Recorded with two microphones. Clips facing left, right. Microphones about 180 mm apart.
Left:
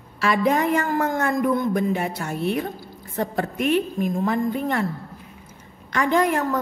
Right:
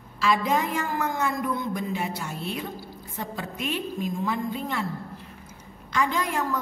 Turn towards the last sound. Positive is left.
turn(degrees=55)  # may be behind; listen again after turning